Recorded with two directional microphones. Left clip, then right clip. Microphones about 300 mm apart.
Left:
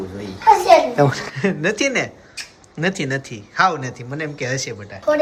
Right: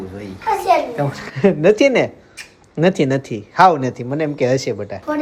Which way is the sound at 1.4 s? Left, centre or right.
Centre.